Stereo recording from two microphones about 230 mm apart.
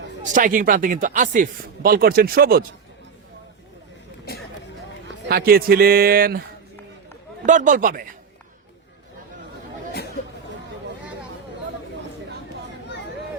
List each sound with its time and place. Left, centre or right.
0.2 s speech: right
5.0 s a man's voice: right
7.4 s speech: right